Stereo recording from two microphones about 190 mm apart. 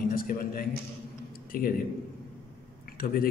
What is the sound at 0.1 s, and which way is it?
A man's voice, 50° left (ahead or behind).